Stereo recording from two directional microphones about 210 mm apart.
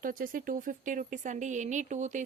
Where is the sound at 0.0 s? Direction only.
40° right (ahead or behind).